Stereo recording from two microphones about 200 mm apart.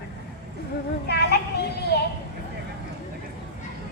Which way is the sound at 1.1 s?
55° left (ahead or behind).